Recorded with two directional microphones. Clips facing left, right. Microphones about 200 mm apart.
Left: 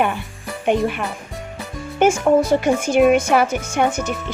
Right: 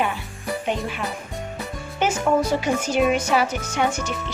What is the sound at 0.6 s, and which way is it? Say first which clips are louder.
Speech: left 10 dB; 60° left (ahead or behind).